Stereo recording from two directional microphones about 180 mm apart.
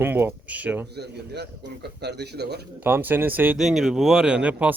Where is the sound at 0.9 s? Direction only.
65° right (ahead or behind).